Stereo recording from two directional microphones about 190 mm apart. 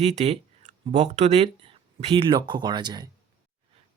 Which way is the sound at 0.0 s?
35° right (ahead or behind).